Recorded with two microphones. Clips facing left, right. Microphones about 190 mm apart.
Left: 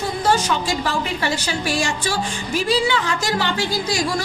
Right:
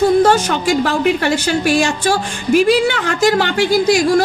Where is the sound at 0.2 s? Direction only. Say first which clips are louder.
Right 6 dB; 60° right (ahead or behind).